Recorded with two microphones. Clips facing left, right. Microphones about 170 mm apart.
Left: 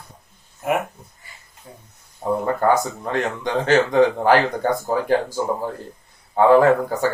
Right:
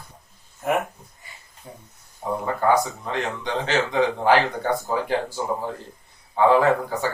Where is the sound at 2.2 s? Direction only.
45° left (ahead or behind).